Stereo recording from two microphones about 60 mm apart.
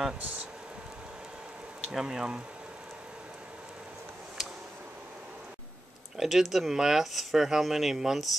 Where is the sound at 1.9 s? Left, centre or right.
Centre.